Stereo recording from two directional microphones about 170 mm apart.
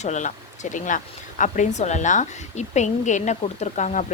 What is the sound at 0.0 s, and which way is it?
A woman's voice, 45° left (ahead or behind).